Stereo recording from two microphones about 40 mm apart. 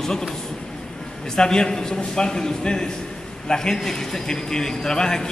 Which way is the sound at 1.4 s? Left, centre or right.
Centre.